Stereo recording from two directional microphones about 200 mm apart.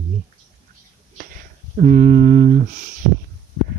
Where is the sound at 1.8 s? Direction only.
40° right (ahead or behind).